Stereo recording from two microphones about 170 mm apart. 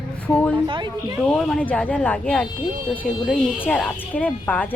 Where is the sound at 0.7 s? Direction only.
25° right (ahead or behind).